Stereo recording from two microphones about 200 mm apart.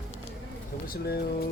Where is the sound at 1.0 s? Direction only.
50° left (ahead or behind).